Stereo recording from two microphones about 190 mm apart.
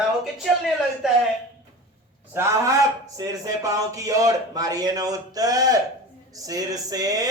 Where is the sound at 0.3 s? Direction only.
Centre (ahead or behind).